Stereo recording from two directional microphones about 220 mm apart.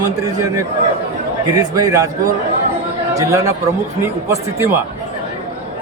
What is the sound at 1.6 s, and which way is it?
Speech, 15° right (ahead or behind).